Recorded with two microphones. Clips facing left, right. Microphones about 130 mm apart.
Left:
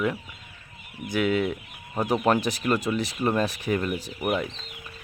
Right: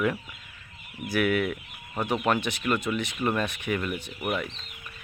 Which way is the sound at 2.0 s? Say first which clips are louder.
Left 3 dB; 35° left (ahead or behind).